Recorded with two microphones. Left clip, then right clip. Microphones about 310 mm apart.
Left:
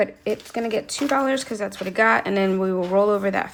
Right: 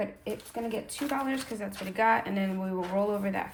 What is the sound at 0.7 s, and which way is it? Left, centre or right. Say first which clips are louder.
A woman's voice: left 11 dB; centre.